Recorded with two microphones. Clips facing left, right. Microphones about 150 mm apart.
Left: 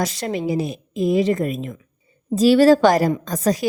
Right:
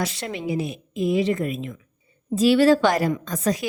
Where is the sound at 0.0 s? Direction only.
40° left (ahead or behind).